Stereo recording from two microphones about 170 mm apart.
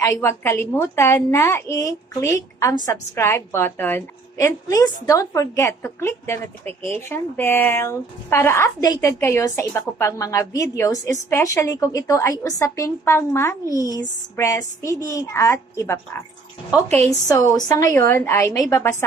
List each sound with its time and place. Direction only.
0.0 s a woman's voice: 15° left (ahead or behind)
17.3 s a woman's voice: 20° left (ahead or behind)